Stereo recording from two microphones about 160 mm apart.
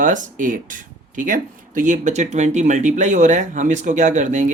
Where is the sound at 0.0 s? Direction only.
55° right (ahead or behind).